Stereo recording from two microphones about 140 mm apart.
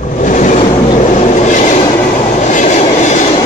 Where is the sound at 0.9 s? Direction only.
60° left (ahead or behind).